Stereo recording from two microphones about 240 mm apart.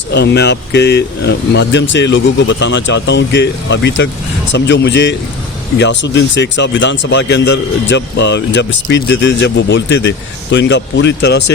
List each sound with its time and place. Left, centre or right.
0.1 s speech: left